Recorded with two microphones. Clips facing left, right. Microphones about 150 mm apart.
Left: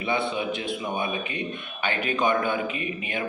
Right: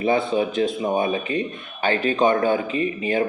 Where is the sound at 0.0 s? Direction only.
40° right (ahead or behind).